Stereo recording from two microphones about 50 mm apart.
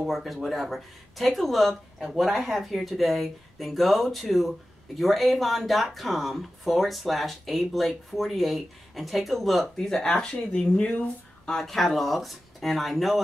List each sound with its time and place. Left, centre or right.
0.0 s speech: centre
9.8 s speech: centre
10.8 s speech: left
11.4 s speech: centre